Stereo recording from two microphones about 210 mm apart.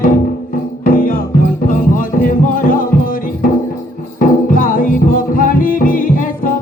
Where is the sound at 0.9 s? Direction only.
40° left (ahead or behind).